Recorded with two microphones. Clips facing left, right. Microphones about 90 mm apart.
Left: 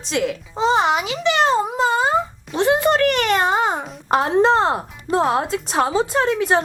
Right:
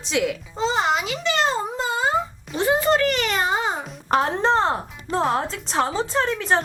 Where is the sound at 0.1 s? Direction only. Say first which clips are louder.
Left 1 dB; centre (ahead or behind).